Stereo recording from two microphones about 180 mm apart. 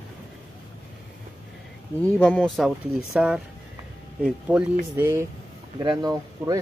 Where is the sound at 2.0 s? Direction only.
5° left (ahead or behind).